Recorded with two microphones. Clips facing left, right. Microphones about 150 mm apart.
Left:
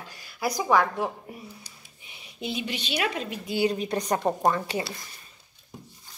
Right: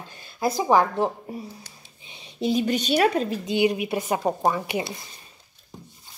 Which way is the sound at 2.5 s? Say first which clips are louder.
Right 9 dB; 40° right (ahead or behind).